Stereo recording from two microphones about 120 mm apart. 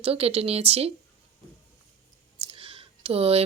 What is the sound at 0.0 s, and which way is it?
Speech, 55° right (ahead or behind).